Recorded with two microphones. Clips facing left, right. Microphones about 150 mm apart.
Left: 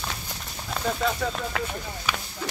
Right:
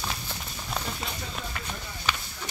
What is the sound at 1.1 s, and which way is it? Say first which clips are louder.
Speech: left 9 dB; 90° left.